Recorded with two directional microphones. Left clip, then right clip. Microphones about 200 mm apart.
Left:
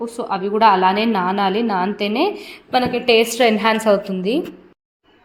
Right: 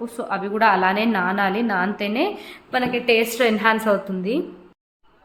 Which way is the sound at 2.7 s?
20° left (ahead or behind).